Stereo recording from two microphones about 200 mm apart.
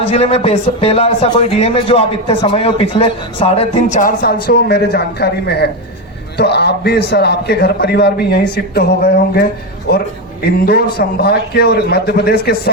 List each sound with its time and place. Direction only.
0.0 s a man's voice: 30° left (ahead or behind); by 9.5 s 50° left (ahead or behind)
10.7 s a man's voice: 50° left (ahead or behind)